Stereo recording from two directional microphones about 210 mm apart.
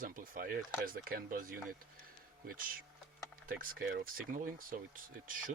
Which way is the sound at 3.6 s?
50° right (ahead or behind).